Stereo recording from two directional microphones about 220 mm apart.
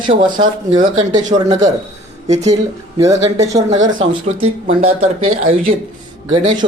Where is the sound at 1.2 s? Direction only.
35° right (ahead or behind).